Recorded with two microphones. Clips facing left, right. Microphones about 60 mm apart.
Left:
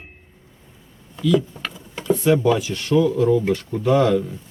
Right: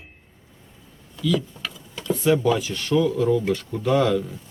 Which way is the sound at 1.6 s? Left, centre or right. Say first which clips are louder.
Left 3 dB; left.